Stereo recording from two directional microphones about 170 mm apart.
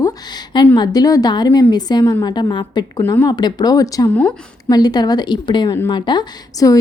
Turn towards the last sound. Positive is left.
turn(degrees=25)  # may be behind; listen again after turning